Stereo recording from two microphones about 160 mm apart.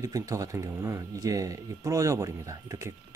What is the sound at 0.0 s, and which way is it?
Speech, 20° right (ahead or behind).